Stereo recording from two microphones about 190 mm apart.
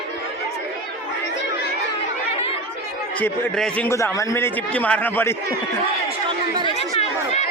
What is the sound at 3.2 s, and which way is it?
A man's voice, 10° left (ahead or behind).